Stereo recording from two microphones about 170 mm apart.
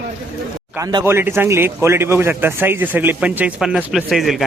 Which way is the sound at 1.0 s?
15° right (ahead or behind).